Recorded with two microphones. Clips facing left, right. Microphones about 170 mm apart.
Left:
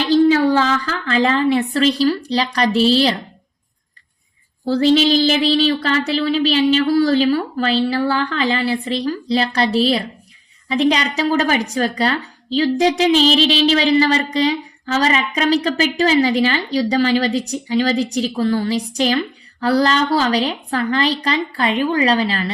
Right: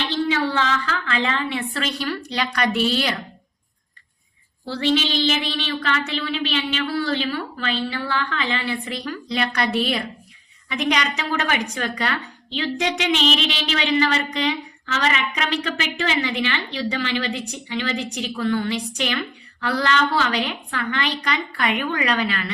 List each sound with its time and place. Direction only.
0.0 s a woman's voice: 40° left (ahead or behind)
4.6 s a woman's voice: 40° left (ahead or behind)